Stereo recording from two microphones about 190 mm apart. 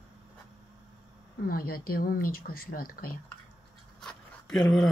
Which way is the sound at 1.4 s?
50° left (ahead or behind).